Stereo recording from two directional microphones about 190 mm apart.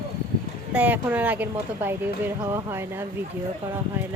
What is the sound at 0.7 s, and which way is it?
A woman's voice, 10° right (ahead or behind).